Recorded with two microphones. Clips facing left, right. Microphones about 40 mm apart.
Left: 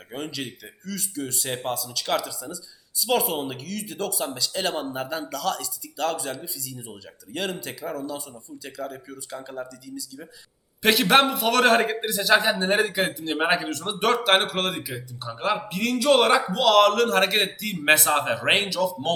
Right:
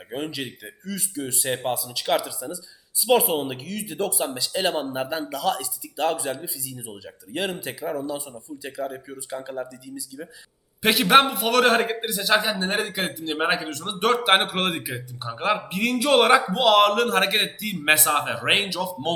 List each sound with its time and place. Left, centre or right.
0.1 s a man's voice: centre
14.3 s a man's voice: centre